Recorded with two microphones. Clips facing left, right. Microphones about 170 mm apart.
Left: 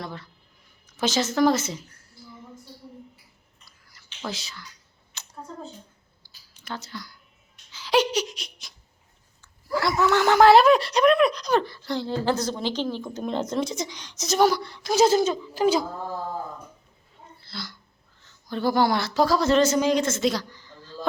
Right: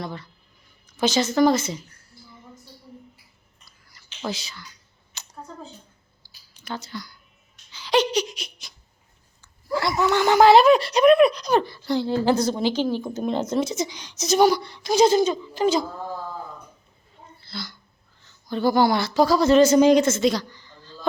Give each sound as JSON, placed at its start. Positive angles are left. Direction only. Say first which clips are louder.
{"t": 0.0, "sound": "speech", "louder": "right 3 dB", "side_deg": 0}
{"t": 3.7, "sound": "a sound", "louder": "right 2 dB", "side_deg": 0}
{"t": 4.3, "sound": "speech", "louder": "right 4 dB", "side_deg": 0}
{"t": 5.1, "sound": "a sound", "louder": "left 1 dB", "side_deg": 0}
{"t": 9.4, "sound": "speech", "louder": "right 1 dB", "side_deg": 0}
{"t": 17.4, "sound": "a sound", "louder": "right 2 dB", "side_deg": 0}
{"t": 18.4, "sound": "speech", "louder": "right 3 dB", "side_deg": 0}
{"t": 19.6, "sound": "speech", "louder": "right 6 dB", "side_deg": -15}
{"t": 20.1, "sound": "a woman's voice", "louder": "right 4 dB", "side_deg": 0}